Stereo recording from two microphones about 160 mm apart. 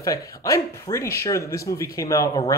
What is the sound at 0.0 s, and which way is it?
Speech, 20° left (ahead or behind).